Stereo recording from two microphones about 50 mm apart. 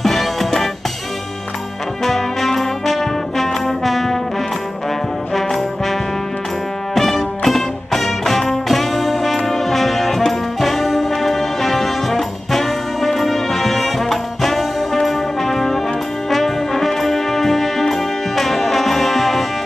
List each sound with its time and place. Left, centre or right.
0.0 s music: centre
2.0 s brass instrument: centre
5.3 s brass instrument: centre
7.0 s music: centre
9.5 s brass instrument: centre